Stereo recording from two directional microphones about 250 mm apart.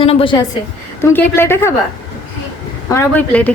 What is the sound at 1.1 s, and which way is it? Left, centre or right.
Speech, centre.